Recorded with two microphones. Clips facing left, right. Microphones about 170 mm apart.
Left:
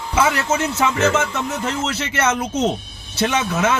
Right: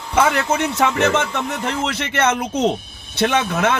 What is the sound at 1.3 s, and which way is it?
Speech, 60° right (ahead or behind).